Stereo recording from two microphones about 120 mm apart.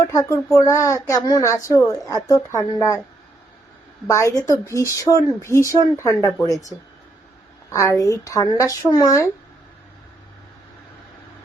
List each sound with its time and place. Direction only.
0.0 s speech: 25° left (ahead or behind)
4.0 s speech: 25° left (ahead or behind)